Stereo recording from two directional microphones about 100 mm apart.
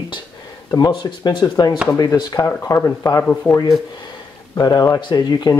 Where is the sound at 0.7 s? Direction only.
40° left (ahead or behind).